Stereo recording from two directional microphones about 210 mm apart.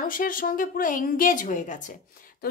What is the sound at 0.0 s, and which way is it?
A woman's voice, 40° left (ahead or behind).